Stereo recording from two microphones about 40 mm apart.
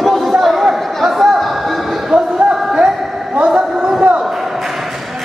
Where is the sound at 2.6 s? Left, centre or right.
Centre.